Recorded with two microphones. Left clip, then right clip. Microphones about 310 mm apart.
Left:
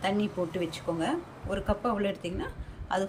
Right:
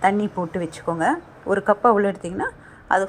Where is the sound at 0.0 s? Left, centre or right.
Right.